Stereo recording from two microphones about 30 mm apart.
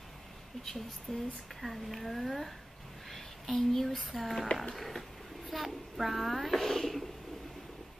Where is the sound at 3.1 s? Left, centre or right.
Centre.